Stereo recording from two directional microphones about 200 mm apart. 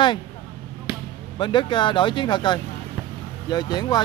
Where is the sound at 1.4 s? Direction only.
25° left (ahead or behind).